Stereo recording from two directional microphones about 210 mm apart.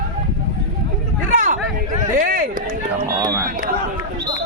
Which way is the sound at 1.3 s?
40° right (ahead or behind).